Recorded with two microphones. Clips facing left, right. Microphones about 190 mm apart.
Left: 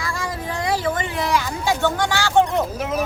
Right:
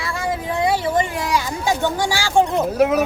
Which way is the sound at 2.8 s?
65° right (ahead or behind).